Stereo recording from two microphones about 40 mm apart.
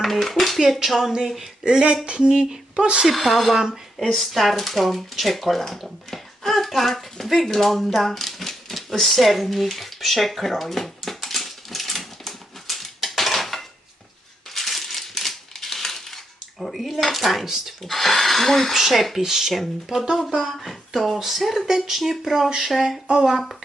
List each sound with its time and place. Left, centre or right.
0.0 s dishes: centre
0.9 s speech: centre
1.6 s speech: right
3.1 s speech: centre
3.5 s speech: centre
4.1 s speech: centre
7.5 s typewriter: centre
14.5 s coin: centre
17.8 s speech: centre
18.7 s speech: centre
19.9 s speech: centre
20.4 s speech: centre